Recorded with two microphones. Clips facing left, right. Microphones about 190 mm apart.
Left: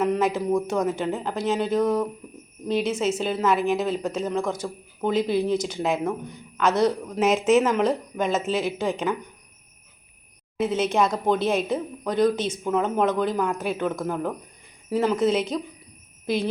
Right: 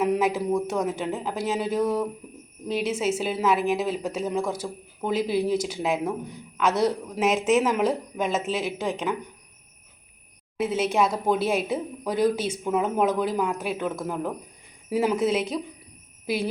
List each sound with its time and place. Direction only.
0.0 s speech: 5° right (ahead or behind)
10.6 s speech: 5° right (ahead or behind)